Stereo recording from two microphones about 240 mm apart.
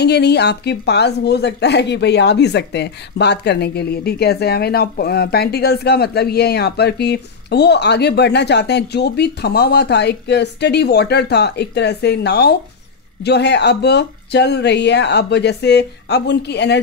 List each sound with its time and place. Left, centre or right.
0.0 s a woman's voice: left